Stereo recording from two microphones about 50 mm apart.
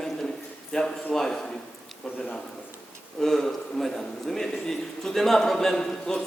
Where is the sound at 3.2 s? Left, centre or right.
Centre.